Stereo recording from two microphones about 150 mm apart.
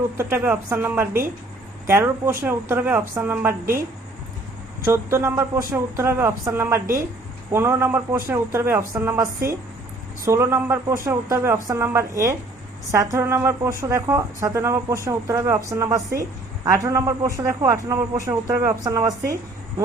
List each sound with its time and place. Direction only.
0.2 s a man's voice: 15° right (ahead or behind)
4.9 s a man's voice: 15° right (ahead or behind)